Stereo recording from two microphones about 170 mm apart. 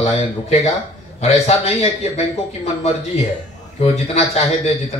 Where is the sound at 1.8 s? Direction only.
35° left (ahead or behind).